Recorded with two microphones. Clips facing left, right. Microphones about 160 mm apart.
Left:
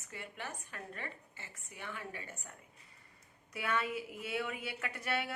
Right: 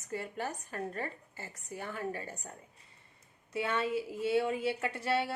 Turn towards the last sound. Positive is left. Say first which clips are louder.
# right 6 dB
turn(degrees=-30)  # may be behind; listen again after turning